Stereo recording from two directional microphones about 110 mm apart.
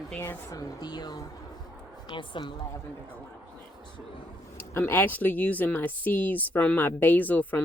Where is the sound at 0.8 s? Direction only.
40° left (ahead or behind).